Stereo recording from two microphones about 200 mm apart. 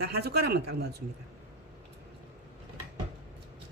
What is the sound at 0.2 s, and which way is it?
Speech, 55° right (ahead or behind).